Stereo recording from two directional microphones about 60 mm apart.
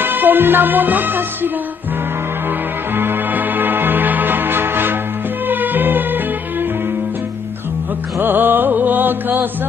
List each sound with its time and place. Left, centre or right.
0.0 s music: right
3.0 s music: right
8.2 s music: right